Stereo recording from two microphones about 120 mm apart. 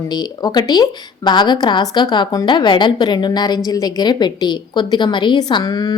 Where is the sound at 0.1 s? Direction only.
35° left (ahead or behind).